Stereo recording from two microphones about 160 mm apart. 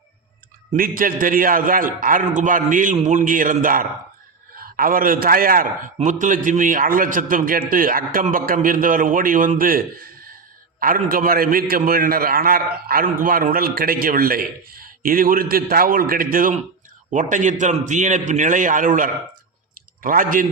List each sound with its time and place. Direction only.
0.8 s a man's voice: 60° right (ahead or behind)